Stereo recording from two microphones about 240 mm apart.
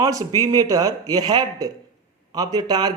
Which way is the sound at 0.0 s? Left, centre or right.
Centre.